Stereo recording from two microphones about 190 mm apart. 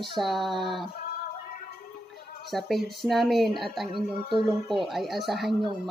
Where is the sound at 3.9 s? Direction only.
25° right (ahead or behind).